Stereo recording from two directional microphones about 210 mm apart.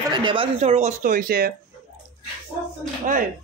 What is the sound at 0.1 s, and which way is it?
Speech, 25° right (ahead or behind).